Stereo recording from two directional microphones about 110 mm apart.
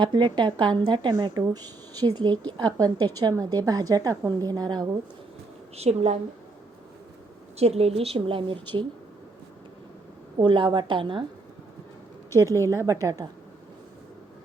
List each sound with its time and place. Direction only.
0.0 s a woman's voice: 45° right (ahead or behind)
1.4 s a woman's voice: 35° right (ahead or behind)
5.7 s a woman's voice: 75° right (ahead or behind)
7.6 s a woman's voice: 70° right (ahead or behind); by 8.5 s 55° right (ahead or behind)
10.3 s a woman's voice: 45° right (ahead or behind)
12.3 s a woman's voice: 30° right (ahead or behind)